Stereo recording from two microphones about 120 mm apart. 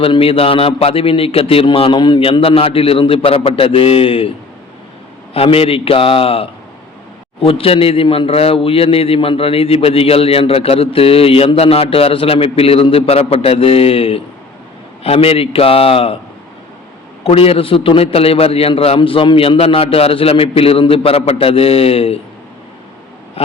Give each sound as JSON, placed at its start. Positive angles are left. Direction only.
{"t": 0.0, "sound": "a man's voice", "side_deg": 50}
{"t": 5.3, "sound": "a man's voice", "side_deg": 50}
{"t": 17.2, "sound": "a man's voice", "side_deg": 55}